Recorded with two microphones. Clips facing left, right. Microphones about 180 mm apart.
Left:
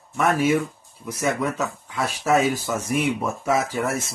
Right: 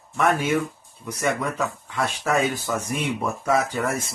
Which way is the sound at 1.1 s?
5° left (ahead or behind).